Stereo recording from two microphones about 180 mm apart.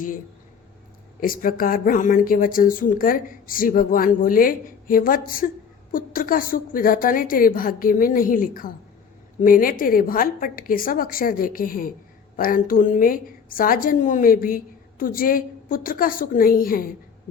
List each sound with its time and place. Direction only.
1.2 s a woman's voice: 50° left (ahead or behind)